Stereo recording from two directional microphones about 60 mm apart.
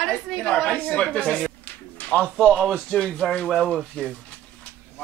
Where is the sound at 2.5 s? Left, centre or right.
Centre.